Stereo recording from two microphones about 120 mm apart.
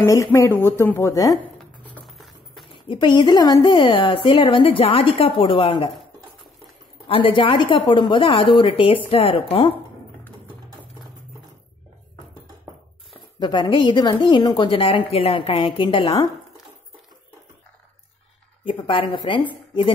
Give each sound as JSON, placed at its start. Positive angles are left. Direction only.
{"t": 0.0, "sound": "a woman's voice", "side_deg": 25}
{"t": 2.0, "sound": "music", "side_deg": 0}
{"t": 2.9, "sound": "a woman's voice", "side_deg": 40}
{"t": 7.1, "sound": "a woman's voice", "side_deg": 50}
{"t": 13.4, "sound": "a woman's voice", "side_deg": 40}
{"t": 18.6, "sound": "a woman's voice", "side_deg": 45}